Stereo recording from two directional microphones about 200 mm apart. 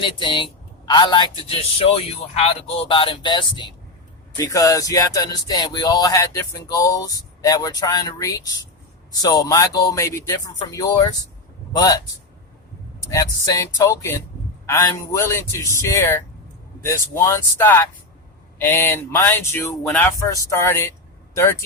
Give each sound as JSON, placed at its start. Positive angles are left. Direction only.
{"t": 0.0, "sound": "speech", "side_deg": 25}
{"t": 4.4, "sound": "music", "side_deg": 15}
{"t": 10.7, "sound": "speech", "side_deg": 20}
{"t": 11.8, "sound": "music", "side_deg": 20}
{"t": 13.1, "sound": "music", "side_deg": 15}